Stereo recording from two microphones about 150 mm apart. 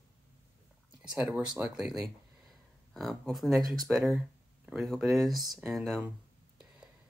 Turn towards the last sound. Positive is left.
turn(degrees=0)  # may be behind; listen again after turning